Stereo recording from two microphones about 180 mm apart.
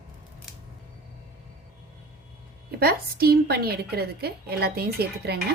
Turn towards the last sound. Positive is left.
turn(degrees=-60)  # may be behind; listen again after turning